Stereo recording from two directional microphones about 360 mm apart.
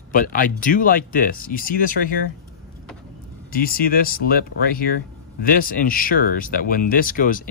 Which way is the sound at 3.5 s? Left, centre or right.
Left.